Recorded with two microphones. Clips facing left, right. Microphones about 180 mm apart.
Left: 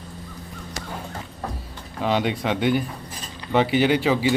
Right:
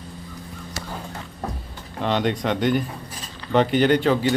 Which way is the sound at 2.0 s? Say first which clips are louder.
Even; 5° left (ahead or behind).